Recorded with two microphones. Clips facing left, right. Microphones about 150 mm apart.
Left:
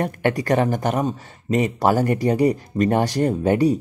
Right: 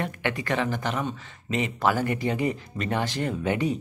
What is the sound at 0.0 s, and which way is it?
Speech, 45° left (ahead or behind).